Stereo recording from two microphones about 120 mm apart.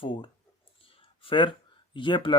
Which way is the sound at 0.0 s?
45° left (ahead or behind).